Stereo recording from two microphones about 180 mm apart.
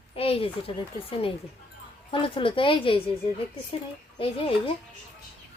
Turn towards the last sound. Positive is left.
turn(degrees=30)  # may be behind; listen again after turning